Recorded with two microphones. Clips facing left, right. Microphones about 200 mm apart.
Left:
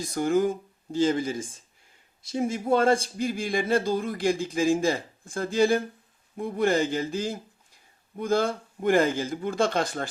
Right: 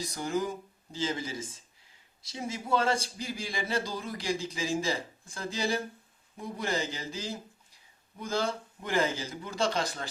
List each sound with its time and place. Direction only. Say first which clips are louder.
0.0 s speech: left 8 dB; 55° left (ahead or behind)